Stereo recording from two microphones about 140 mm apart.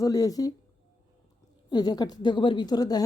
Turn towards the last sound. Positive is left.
turn(degrees=30)  # may be behind; listen again after turning